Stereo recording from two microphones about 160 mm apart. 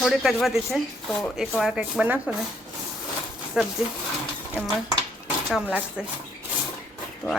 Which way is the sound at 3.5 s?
5° right (ahead or behind).